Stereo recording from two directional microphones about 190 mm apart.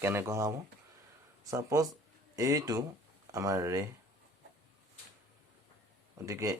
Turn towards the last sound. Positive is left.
turn(degrees=-15)  # may be behind; listen again after turning